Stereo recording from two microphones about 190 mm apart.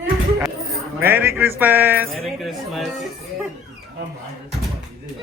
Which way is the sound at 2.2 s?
Centre (ahead or behind).